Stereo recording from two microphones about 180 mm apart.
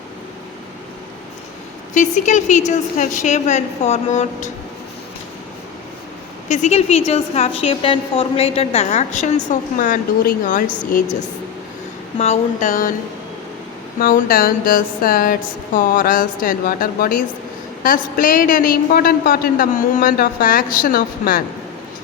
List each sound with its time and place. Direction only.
2.0 s a woman's voice: 45° left (ahead or behind)
6.5 s a woman's voice: 40° left (ahead or behind)
14.0 s a woman's voice: 50° left (ahead or behind)